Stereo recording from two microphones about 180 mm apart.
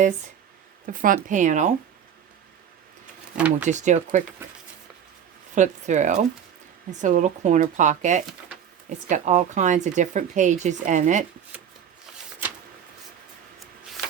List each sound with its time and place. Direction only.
0.9 s speech: 50° right (ahead or behind)
3.3 s speech: 10° right (ahead or behind)
3.7 s speech: 40° right (ahead or behind)
5.5 s speech: 40° right (ahead or behind)